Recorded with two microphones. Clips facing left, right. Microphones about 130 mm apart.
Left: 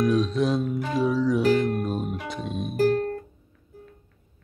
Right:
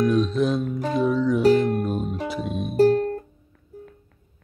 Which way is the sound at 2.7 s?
30° right (ahead or behind).